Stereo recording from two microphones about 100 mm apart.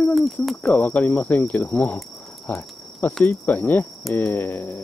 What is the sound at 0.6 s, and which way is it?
Speech, 15° left (ahead or behind).